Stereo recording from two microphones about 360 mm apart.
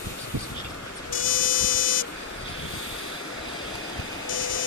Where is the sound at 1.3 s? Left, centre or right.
Left.